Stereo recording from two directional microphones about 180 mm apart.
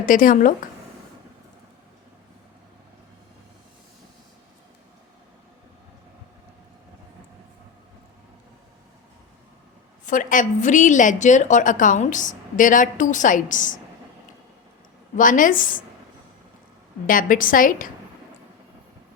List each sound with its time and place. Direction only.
0.0 s a woman's voice: 50° left (ahead or behind)
10.1 s a woman's voice: 45° left (ahead or behind)
15.1 s a woman's voice: 45° left (ahead or behind)
17.1 s a woman's voice: 50° left (ahead or behind)